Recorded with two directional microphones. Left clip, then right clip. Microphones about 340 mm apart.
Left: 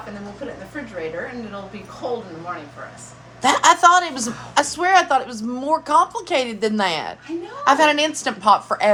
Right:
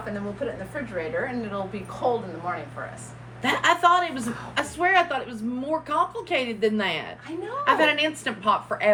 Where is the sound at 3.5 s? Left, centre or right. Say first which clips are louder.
Left 6 dB; centre.